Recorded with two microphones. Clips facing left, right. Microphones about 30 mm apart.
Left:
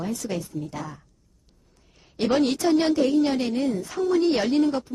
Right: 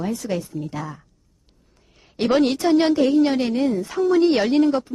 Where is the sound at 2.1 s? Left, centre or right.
Right.